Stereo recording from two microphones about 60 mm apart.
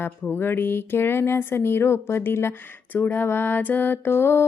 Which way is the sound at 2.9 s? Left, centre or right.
Left.